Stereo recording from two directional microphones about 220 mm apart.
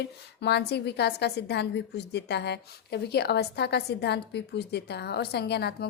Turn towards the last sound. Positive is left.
turn(degrees=50)  # may be behind; listen again after turning